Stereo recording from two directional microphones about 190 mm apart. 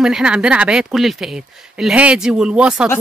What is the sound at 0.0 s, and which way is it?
Speech, 5° right (ahead or behind).